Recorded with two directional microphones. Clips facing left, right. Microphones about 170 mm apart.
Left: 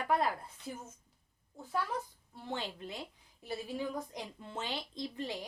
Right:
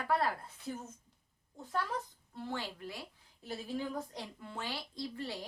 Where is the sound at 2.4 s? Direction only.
20° left (ahead or behind).